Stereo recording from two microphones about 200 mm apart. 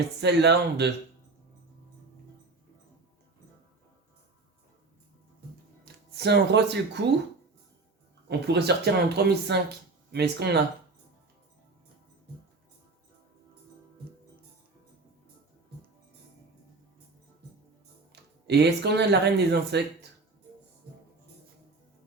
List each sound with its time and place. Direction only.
0.2 s speech: 55° right (ahead or behind)
5.8 s speech: 55° right (ahead or behind)
8.3 s speech: 55° right (ahead or behind)
18.1 s speech: 55° right (ahead or behind)